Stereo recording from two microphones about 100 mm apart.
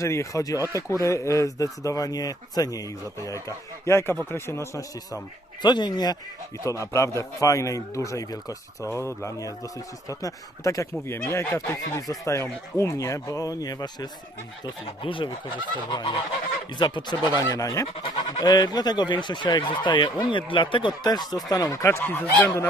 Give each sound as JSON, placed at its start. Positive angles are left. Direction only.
{"t": 0.0, "sound": "speech", "side_deg": 30}
{"t": 5.6, "sound": "speech", "side_deg": 45}
{"t": 6.7, "sound": "speech", "side_deg": 30}
{"t": 8.9, "sound": "speech", "side_deg": 30}
{"t": 14.8, "sound": "speech", "side_deg": 60}